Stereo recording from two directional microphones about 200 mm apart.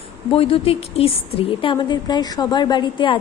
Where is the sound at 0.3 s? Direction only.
30° left (ahead or behind).